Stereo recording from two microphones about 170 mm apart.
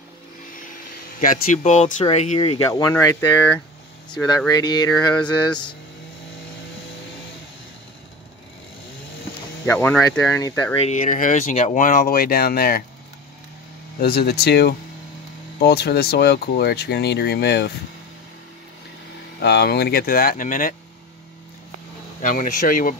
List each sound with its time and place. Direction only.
1.2 s speech: 55° left (ahead or behind)
1.6 s speech: 40° left (ahead or behind)
2.6 s speech: 15° left (ahead or behind)
4.6 s speech: 25° left (ahead or behind)
9.7 s speech: 15° left (ahead or behind)
10.8 s speech: 45° left (ahead or behind); by 12.8 s 65° left (ahead or behind)
14.0 s speech: 65° left (ahead or behind)
19.4 s speech: 75° left (ahead or behind); by 20.7 s 50° left (ahead or behind)
22.2 s speech: 50° left (ahead or behind)